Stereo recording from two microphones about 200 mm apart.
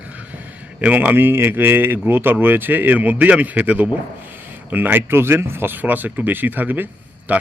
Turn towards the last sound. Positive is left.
turn(degrees=-10)  # may be behind; listen again after turning